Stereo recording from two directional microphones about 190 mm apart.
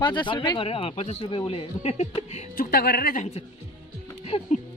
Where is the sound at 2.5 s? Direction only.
50° left (ahead or behind).